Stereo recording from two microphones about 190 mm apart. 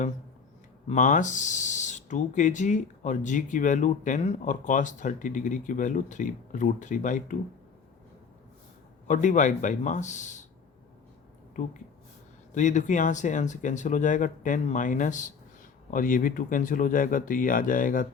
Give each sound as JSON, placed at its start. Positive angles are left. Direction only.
{"t": 0.9, "sound": "speech", "side_deg": 40}
{"t": 9.0, "sound": "speech", "side_deg": 40}
{"t": 12.5, "sound": "speech", "side_deg": 40}